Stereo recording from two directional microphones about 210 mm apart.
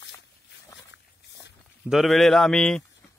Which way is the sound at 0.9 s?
55° left (ahead or behind).